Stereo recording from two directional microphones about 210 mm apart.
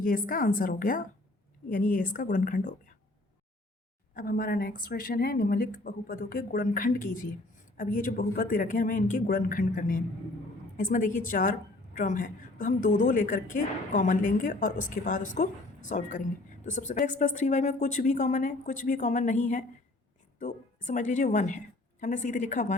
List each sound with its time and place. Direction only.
0.0 s a woman's voice: 40° left (ahead or behind)
4.1 s a woman's voice: 45° left (ahead or behind)